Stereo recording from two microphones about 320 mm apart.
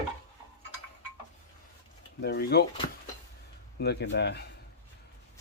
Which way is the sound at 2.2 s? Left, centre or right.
Left.